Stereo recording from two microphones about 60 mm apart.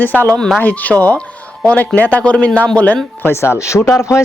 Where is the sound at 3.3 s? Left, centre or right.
Left.